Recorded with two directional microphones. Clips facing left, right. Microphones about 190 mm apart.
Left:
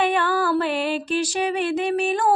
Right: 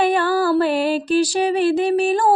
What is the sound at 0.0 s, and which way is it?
Music, 35° right (ahead or behind).